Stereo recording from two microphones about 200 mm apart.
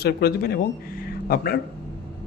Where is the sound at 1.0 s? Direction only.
50° left (ahead or behind).